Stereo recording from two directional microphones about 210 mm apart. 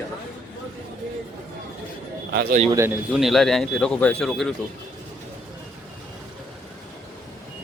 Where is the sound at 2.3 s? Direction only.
50° right (ahead or behind).